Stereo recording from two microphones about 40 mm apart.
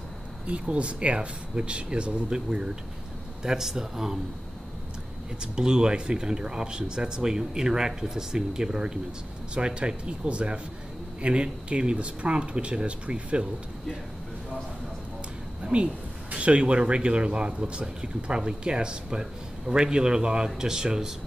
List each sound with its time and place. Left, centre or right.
0.5 s speech: right; by 4.2 s centre
5.4 s speech: centre
15.6 s speech: right